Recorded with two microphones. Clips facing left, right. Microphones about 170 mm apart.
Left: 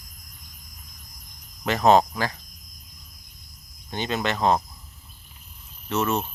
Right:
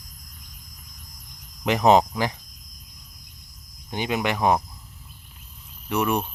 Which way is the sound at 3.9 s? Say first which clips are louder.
Right 1 dB; 15° right (ahead or behind).